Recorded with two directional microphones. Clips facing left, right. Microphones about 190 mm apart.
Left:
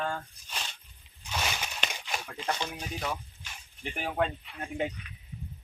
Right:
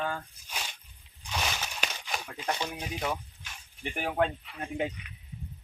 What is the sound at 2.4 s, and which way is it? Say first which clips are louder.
Speech: right 1 dB; 15° right (ahead or behind).